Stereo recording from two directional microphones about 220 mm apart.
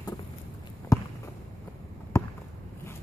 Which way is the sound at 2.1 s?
15° left (ahead or behind).